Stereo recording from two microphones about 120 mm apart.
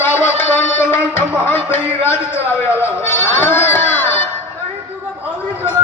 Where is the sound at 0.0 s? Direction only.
15° left (ahead or behind).